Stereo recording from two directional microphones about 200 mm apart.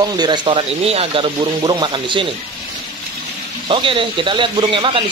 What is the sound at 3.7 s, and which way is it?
A man's voice, 25° right (ahead or behind).